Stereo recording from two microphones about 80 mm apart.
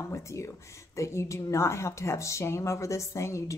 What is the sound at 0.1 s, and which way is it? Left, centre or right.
A woman's voice, left.